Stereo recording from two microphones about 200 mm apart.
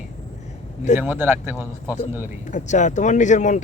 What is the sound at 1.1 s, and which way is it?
Speech, 10° right (ahead or behind).